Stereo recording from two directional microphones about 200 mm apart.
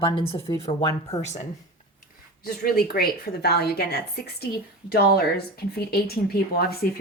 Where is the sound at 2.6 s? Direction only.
50° left (ahead or behind).